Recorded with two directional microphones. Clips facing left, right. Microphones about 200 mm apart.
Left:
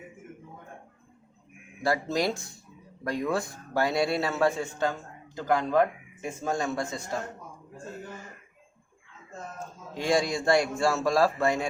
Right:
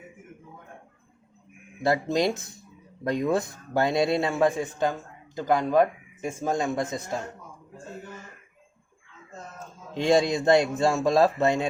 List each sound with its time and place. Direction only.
1.8 s a man's voice: 20° right (ahead or behind)
9.9 s a man's voice: 25° right (ahead or behind)